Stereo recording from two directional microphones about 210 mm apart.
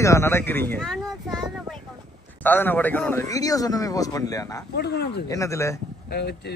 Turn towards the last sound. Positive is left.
turn(degrees=50)  # may be behind; listen again after turning